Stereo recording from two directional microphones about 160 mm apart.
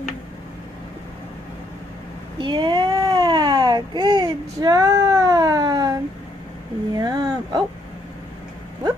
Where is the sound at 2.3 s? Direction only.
30° right (ahead or behind).